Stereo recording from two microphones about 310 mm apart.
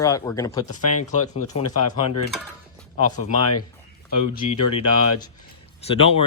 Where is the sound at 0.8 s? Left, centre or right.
Left.